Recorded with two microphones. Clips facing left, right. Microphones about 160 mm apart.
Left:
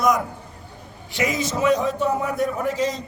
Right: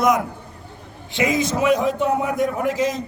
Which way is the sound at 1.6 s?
15° right (ahead or behind).